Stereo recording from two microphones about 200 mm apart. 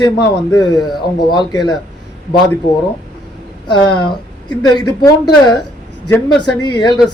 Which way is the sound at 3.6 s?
20° left (ahead or behind).